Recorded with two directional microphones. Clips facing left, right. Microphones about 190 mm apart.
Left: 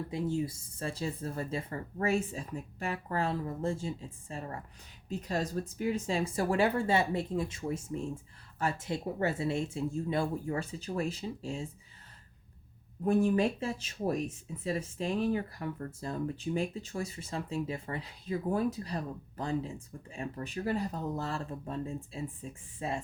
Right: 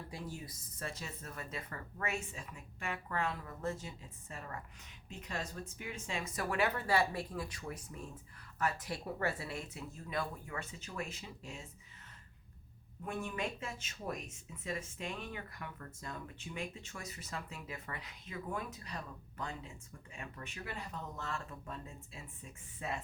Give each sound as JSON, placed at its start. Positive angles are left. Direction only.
{"t": 0.1, "sound": "speech", "side_deg": 25}
{"t": 13.0, "sound": "speech", "side_deg": 35}